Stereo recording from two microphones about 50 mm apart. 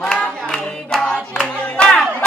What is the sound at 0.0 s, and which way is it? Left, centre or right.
Singing, centre.